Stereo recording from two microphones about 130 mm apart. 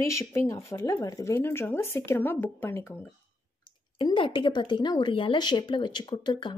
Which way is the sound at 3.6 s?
40° left (ahead or behind).